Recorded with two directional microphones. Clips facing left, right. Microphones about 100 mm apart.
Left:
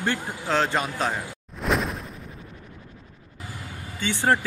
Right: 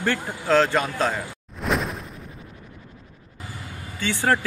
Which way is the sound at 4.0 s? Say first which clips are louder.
Even; 20° left (ahead or behind).